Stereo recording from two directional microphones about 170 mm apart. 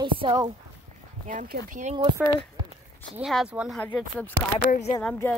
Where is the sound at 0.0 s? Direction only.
25° right (ahead or behind).